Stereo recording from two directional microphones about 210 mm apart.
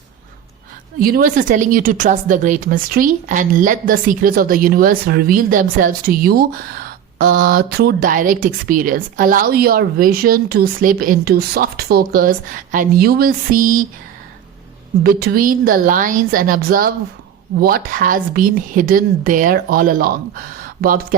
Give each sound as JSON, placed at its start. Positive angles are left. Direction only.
{"t": 0.9, "sound": "speech", "side_deg": -45}
{"t": 15.0, "sound": "a woman's voice", "side_deg": -45}